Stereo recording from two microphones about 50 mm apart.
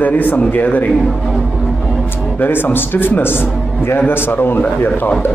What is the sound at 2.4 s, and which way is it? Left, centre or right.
A man's voice, left.